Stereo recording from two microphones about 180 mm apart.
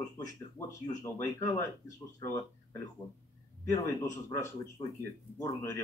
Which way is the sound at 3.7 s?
15° left (ahead or behind).